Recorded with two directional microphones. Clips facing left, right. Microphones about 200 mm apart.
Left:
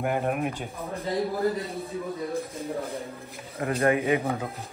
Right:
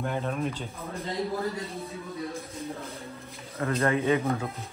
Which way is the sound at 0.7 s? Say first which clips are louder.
Left 3 dB; 30° left (ahead or behind).